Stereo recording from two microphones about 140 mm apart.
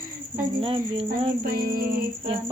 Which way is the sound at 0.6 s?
40° right (ahead or behind).